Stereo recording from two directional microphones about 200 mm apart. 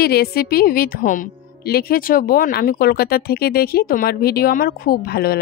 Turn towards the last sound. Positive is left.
turn(degrees=50)  # may be behind; listen again after turning